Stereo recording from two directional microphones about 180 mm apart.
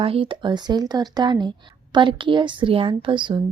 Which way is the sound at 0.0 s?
30° right (ahead or behind).